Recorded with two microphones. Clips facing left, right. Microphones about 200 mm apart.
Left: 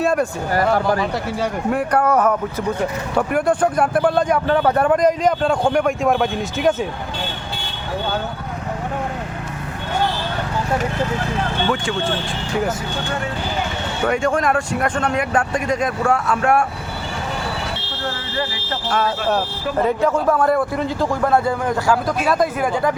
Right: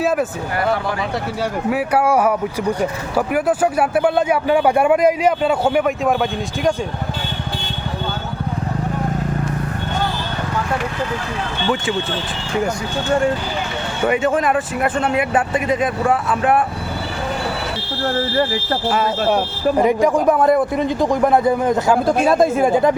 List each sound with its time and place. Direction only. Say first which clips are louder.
0.0 s a sound: even; 5° right (ahead or behind)
1.7 s speech: right 1 dB; 5° right (ahead or behind)
14.1 s speech: right 1 dB; 5° right (ahead or behind)
18.9 s speech: right 1 dB; 10° right (ahead or behind)